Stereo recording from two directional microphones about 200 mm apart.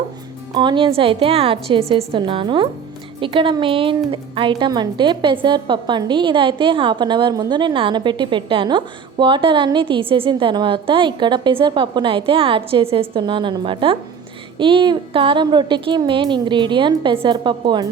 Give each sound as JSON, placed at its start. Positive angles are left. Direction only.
{"t": 0.5, "sound": "a woman's voice", "side_deg": -25}